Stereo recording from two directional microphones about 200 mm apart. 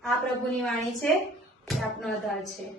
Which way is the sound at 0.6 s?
Centre (ahead or behind).